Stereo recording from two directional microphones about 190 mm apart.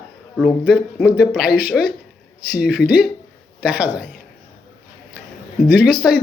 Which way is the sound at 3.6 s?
5° right (ahead or behind).